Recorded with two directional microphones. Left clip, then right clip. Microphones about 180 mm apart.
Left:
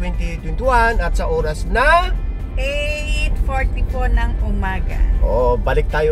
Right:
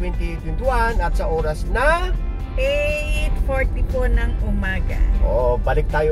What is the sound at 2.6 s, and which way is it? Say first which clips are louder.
Music: right 2 dB; 20° right (ahead or behind).